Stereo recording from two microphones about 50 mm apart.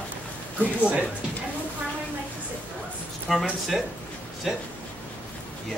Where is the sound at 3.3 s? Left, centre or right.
Centre.